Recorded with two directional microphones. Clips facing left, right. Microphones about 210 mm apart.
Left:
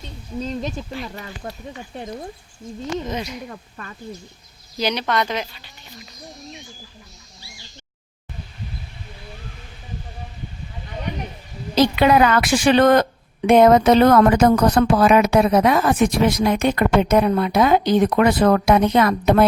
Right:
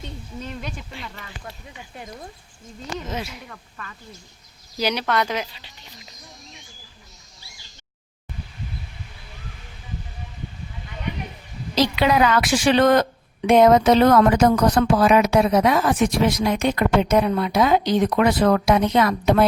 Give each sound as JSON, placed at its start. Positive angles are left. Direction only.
{"t": 1.0, "sound": "speech", "side_deg": 40}
{"t": 3.1, "sound": "speech", "side_deg": -5}
{"t": 3.5, "sound": "speech", "side_deg": 35}
{"t": 4.8, "sound": "speech", "side_deg": -10}
{"t": 11.7, "sound": "speech", "side_deg": 55}